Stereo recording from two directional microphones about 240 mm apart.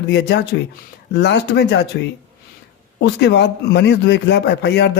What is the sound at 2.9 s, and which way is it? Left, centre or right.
A man's voice, left.